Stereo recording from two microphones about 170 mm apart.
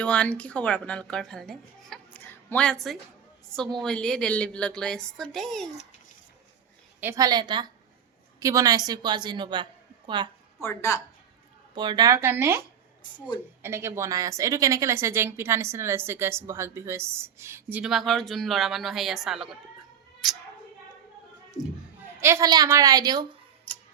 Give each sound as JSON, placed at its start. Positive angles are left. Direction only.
{"t": 0.0, "sound": "a woman's voice", "side_deg": 5}
{"t": 7.0, "sound": "a woman's voice", "side_deg": -20}
{"t": 10.6, "sound": "speech", "side_deg": 15}
{"t": 11.7, "sound": "a woman's voice", "side_deg": -25}
{"t": 22.2, "sound": "a woman's voice", "side_deg": -15}
{"t": 23.7, "sound": "tick-tock", "side_deg": 10}